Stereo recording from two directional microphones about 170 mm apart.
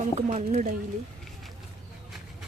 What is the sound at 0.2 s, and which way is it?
Speech, 40° right (ahead or behind).